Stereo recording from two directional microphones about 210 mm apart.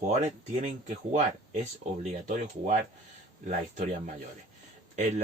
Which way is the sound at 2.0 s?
35° right (ahead or behind).